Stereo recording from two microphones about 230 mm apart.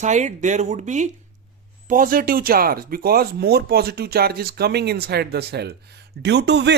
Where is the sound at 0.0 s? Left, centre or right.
Right.